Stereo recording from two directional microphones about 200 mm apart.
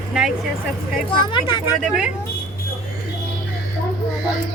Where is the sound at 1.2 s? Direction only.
25° left (ahead or behind).